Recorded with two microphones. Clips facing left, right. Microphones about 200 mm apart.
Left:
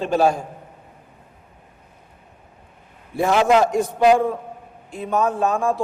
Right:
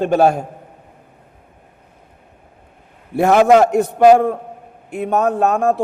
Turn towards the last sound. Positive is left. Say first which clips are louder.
# right 5 dB
turn(degrees=-65)  # may be behind; listen again after turning